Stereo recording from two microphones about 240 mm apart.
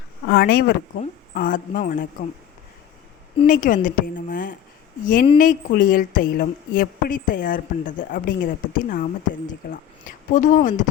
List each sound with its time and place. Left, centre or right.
0.3 s a woman's voice: left
3.3 s a woman's voice: left